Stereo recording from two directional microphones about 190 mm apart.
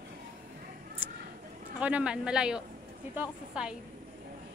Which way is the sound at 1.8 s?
5° right (ahead or behind).